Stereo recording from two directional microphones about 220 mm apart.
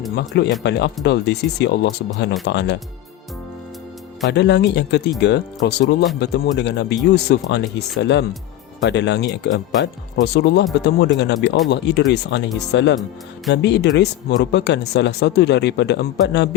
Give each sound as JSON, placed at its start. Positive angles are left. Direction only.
{"t": 0.2, "sound": "speech", "side_deg": 50}
{"t": 4.3, "sound": "speech", "side_deg": 50}